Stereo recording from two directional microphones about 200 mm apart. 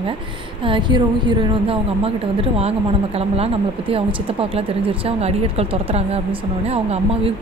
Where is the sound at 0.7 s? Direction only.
25° right (ahead or behind).